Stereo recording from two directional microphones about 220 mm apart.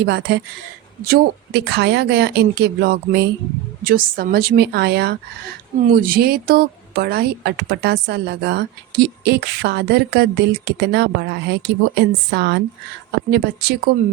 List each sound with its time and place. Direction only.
0.0 s speech: 50° right (ahead or behind)